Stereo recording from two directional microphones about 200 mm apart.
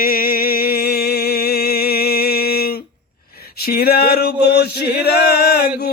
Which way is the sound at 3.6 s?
50° left (ahead or behind).